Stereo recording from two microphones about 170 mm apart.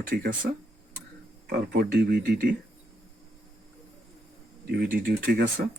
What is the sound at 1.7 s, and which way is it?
Speech, 70° right (ahead or behind).